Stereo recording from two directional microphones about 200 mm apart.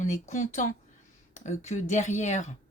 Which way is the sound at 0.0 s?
40° left (ahead or behind).